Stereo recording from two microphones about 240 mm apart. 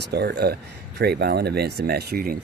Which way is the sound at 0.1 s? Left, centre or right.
Right.